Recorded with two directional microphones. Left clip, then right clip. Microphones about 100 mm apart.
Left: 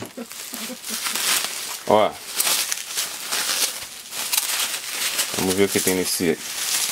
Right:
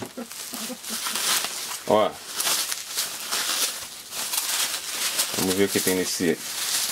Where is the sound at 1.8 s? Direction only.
25° left (ahead or behind).